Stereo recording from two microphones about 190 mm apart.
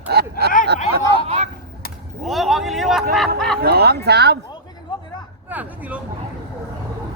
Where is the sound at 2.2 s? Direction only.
Centre (ahead or behind).